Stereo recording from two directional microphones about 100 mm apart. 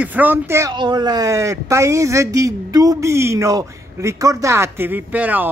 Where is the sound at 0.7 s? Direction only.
45° right (ahead or behind).